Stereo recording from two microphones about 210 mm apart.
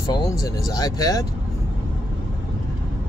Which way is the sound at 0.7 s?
20° left (ahead or behind).